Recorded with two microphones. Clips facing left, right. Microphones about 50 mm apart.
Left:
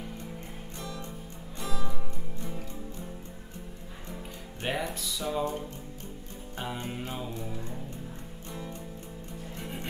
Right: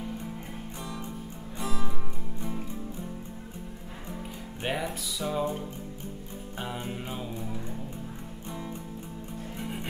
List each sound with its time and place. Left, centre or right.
1.6 s music: right
4.6 s music: centre
6.6 s mantra: centre
9.6 s music: centre